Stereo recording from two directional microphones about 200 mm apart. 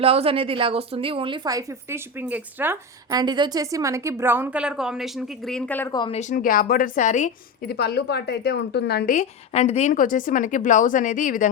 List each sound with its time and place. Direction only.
0.0 s a woman's voice: 30° right (ahead or behind); by 5.9 s 10° left (ahead or behind)
5.9 s speech: 20° left (ahead or behind)
6.1 s speech: 40° left (ahead or behind)
7.7 s a woman's voice: 55° left (ahead or behind)
9.1 s a woman's voice: 30° left (ahead or behind)